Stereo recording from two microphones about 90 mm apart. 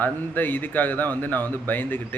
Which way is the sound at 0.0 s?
20° left (ahead or behind).